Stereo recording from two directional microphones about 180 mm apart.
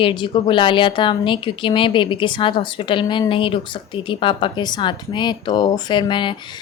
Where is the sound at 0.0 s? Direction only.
25° left (ahead or behind).